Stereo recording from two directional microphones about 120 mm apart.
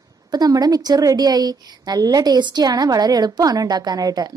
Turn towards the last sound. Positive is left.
turn(degrees=-30)  # may be behind; listen again after turning